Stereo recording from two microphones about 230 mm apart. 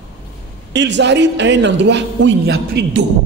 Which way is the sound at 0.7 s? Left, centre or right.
Right.